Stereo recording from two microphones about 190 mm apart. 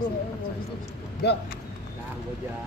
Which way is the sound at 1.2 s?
60° left (ahead or behind).